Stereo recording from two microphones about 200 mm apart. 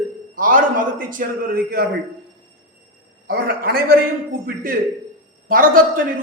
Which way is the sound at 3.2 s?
50° right (ahead or behind).